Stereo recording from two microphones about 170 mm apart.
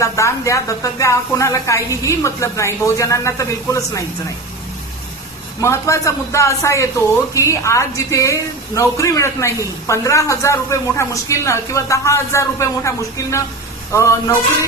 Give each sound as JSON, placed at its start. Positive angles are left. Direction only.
{"t": 0.0, "sound": "a woman's voice", "side_deg": 15}
{"t": 5.5, "sound": "a woman's voice", "side_deg": 15}